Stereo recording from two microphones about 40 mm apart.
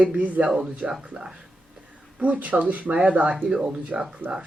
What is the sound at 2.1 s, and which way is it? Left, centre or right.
Speech, right.